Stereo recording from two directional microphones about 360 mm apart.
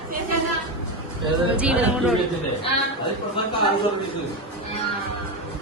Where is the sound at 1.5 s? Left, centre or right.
Centre.